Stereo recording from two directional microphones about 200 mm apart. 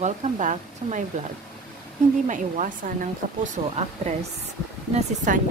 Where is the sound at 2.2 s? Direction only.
40° right (ahead or behind).